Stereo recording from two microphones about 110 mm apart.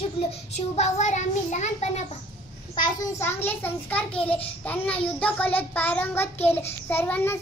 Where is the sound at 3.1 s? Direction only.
20° left (ahead or behind).